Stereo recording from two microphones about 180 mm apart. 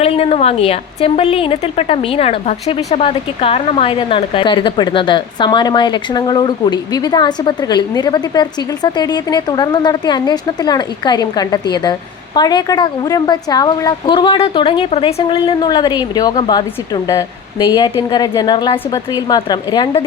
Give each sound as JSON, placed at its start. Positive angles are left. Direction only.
{"t": 0.0, "sound": "a woman's voice", "side_deg": 35}